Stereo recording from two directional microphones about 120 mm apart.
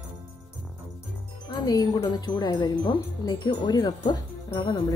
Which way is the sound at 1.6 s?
30° left (ahead or behind).